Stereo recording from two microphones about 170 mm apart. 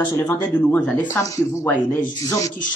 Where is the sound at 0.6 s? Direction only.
10° left (ahead or behind).